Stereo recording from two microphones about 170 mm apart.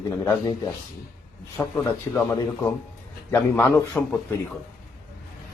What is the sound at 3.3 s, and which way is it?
Speech, 15° left (ahead or behind).